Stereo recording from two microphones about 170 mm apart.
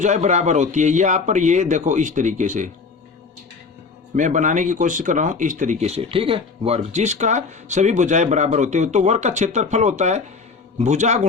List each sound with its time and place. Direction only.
0.0 s speech: 45° right (ahead or behind)
4.1 s speech: 45° right (ahead or behind)